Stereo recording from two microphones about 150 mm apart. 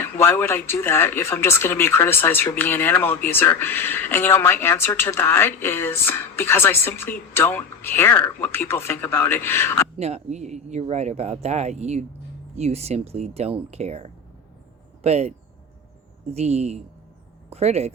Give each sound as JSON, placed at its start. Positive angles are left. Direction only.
{"t": 0.0, "sound": "speech", "side_deg": 15}
{"t": 10.0, "sound": "speech", "side_deg": -45}